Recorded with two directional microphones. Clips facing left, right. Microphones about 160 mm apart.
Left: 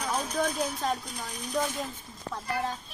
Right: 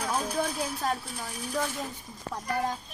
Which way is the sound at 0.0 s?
10° right (ahead or behind).